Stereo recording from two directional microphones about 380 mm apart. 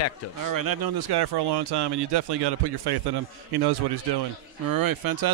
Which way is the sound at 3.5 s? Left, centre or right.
Right.